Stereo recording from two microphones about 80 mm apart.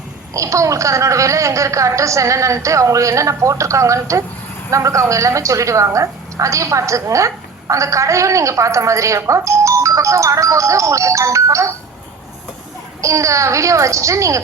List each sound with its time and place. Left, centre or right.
0.3 s a woman's voice: right
13.0 s a woman's voice: right